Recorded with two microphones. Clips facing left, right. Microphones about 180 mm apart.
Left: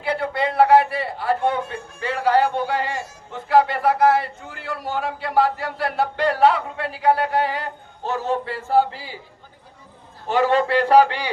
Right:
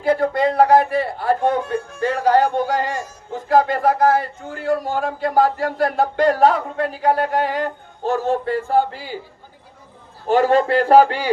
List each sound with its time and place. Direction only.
0.0 s speech: 40° right (ahead or behind)
10.2 s speech: 40° right (ahead or behind)